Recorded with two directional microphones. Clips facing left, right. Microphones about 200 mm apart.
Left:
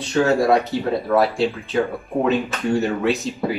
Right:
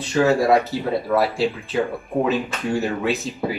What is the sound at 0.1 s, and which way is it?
Speech, centre (ahead or behind).